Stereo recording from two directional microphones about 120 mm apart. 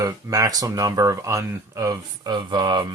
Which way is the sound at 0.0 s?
30° right (ahead or behind).